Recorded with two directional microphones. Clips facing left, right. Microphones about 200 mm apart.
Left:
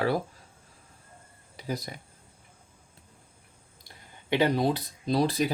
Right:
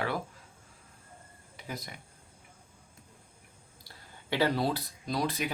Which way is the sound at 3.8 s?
20° left (ahead or behind).